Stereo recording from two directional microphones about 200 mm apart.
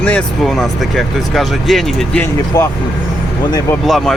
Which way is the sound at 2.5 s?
20° left (ahead or behind).